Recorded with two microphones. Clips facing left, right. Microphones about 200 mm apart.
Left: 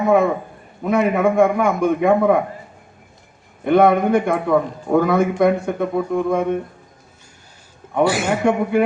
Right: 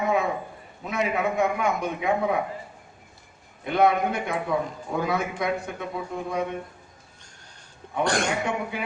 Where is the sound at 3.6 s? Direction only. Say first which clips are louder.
Left 8 dB; 55° left (ahead or behind).